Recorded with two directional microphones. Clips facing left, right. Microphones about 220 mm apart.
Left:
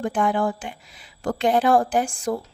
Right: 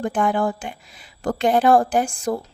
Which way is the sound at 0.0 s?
45° right (ahead or behind).